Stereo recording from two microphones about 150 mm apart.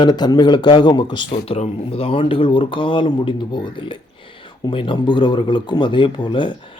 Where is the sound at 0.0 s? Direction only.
30° left (ahead or behind).